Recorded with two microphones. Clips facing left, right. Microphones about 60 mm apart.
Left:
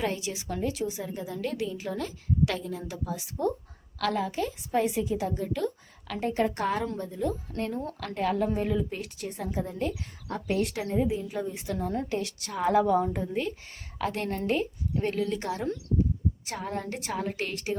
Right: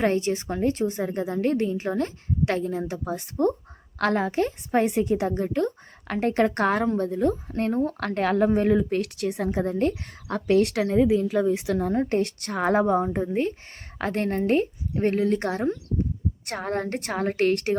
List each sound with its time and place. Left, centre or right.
0.0 s a woman's voice: right
7.4 s a woman's voice: right
7.9 s a woman's voice: right
10.2 s a woman's voice: right
11.8 s a woman's voice: right
12.8 s a woman's voice: right
15.4 s a woman's voice: right